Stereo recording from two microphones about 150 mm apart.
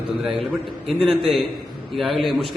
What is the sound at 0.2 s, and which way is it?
A man's voice, centre (ahead or behind).